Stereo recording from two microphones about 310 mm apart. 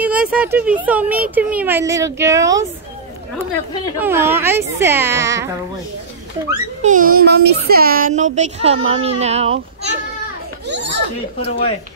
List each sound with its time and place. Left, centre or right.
0.0 s a sound: centre
0.8 s speech: centre
4.0 s speech: centre
6.8 s speech: right